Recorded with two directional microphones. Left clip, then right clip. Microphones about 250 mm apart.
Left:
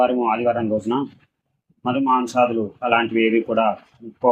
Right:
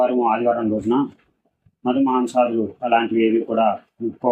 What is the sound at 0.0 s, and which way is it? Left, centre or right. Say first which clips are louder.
Speech: even; centre.